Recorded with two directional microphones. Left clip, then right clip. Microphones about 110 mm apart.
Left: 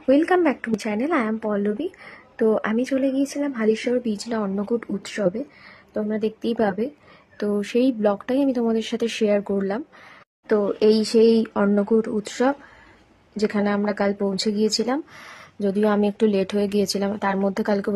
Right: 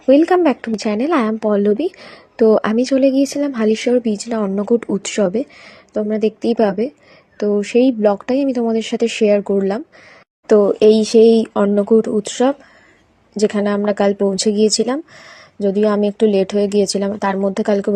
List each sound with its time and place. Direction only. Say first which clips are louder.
0.1 s a woman's voice: right 6 dB; 30° right (ahead or behind); by 5.4 s 50° right (ahead or behind)
5.9 s a woman's voice: right 7 dB; 35° right (ahead or behind)
7.3 s speech: right 8 dB; 25° right (ahead or behind)
10.8 s speech: right 7 dB; 25° right (ahead or behind)